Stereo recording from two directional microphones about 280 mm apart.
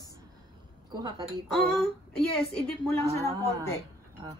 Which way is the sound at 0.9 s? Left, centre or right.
Centre.